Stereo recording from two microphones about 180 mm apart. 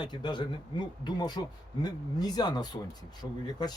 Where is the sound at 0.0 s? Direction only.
25° left (ahead or behind).